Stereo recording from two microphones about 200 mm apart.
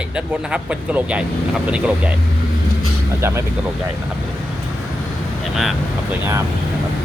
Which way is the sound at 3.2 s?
15° right (ahead or behind).